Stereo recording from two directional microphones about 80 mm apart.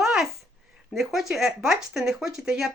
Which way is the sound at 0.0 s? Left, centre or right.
Centre.